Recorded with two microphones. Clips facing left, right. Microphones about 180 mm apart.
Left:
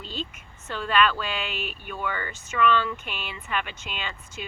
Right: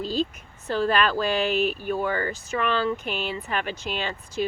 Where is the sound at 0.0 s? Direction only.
35° right (ahead or behind).